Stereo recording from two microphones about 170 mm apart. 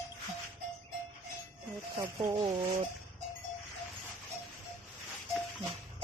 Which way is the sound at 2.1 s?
30° right (ahead or behind).